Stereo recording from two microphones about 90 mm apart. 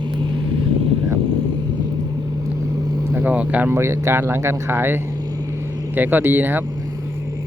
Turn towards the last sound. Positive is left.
turn(degrees=-20)  # may be behind; listen again after turning